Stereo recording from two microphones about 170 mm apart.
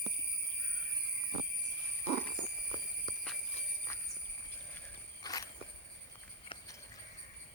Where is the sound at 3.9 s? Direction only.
15° left (ahead or behind).